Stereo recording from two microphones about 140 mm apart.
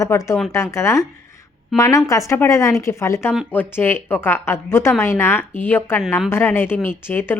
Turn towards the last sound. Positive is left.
turn(degrees=15)  # may be behind; listen again after turning